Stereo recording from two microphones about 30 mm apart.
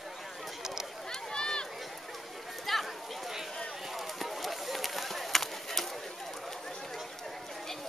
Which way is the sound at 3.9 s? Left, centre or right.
Centre.